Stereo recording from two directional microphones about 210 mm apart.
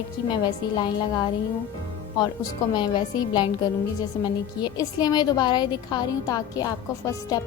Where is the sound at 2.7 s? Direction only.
20° left (ahead or behind).